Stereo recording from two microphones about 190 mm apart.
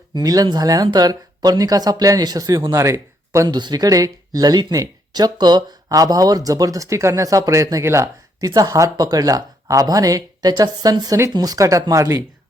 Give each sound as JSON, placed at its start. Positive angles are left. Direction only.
{"t": 0.1, "sound": "speech", "side_deg": -20}